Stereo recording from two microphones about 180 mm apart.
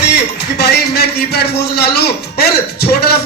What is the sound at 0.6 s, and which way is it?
A man's voice, 65° left (ahead or behind).